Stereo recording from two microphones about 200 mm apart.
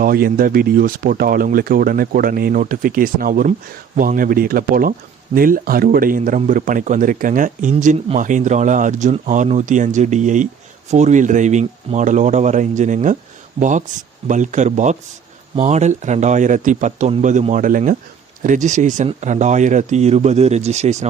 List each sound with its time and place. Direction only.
0.0 s speech: 45° right (ahead or behind)